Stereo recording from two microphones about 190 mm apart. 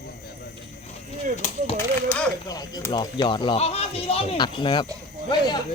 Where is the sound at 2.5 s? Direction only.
20° left (ahead or behind).